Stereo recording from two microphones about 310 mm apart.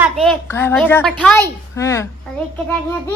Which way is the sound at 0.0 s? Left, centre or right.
Centre.